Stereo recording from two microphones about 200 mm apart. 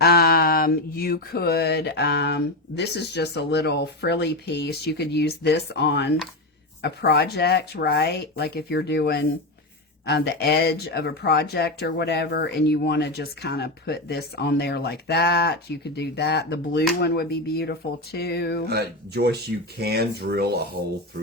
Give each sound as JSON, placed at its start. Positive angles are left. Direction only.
{"t": 0.0, "sound": "speech", "side_deg": 50}
{"t": 18.7, "sound": "speech", "side_deg": -55}